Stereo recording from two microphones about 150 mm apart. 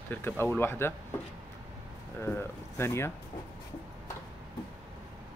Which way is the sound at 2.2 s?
15° left (ahead or behind).